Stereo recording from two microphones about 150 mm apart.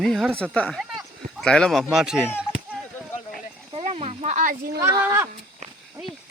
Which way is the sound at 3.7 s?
35° right (ahead or behind).